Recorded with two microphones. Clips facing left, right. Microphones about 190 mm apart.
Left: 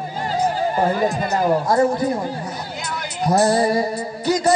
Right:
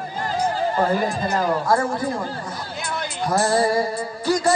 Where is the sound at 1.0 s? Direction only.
20° left (ahead or behind).